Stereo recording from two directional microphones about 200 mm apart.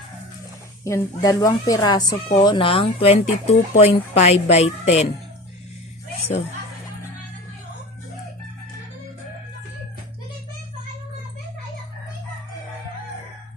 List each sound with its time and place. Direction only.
0.9 s speech: 15° left (ahead or behind); by 5.0 s 30° left (ahead or behind)